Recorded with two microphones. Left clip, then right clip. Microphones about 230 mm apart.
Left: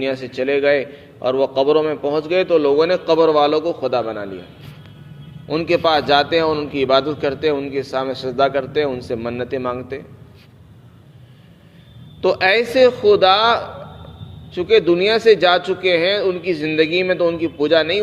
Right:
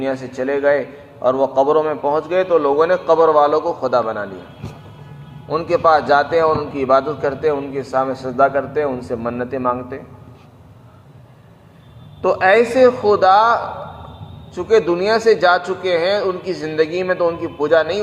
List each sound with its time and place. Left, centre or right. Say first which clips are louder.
0.0 s a man's voice: even; left
5.5 s a man's voice: right 2 dB; left
12.2 s a man's voice: right 2 dB; left